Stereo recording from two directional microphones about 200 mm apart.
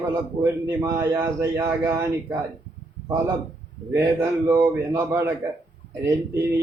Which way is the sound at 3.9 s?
15° right (ahead or behind).